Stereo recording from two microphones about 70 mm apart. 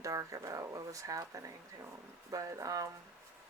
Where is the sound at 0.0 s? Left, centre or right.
Right.